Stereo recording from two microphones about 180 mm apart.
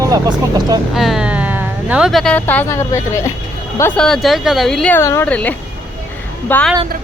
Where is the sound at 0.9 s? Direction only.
Centre (ahead or behind).